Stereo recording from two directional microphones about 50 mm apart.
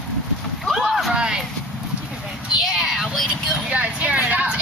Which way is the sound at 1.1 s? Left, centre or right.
Centre.